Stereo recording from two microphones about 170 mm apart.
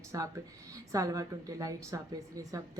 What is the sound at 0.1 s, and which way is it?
A woman's voice, 20° right (ahead or behind).